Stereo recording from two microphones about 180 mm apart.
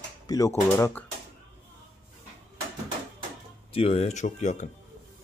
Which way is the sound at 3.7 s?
35° left (ahead or behind).